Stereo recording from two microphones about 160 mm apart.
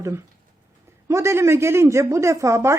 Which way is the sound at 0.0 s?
15° right (ahead or behind).